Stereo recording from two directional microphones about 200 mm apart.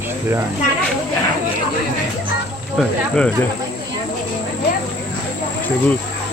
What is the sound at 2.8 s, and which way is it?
Speech, 5° left (ahead or behind).